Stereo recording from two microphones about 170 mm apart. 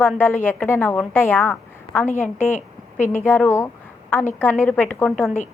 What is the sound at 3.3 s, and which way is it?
A woman's voice, 10° left (ahead or behind).